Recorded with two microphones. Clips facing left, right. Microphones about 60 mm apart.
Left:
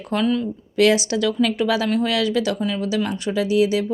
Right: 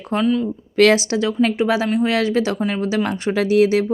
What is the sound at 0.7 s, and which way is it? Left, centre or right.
Speech, right.